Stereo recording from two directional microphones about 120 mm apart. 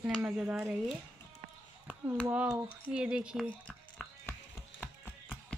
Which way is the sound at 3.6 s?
15° left (ahead or behind).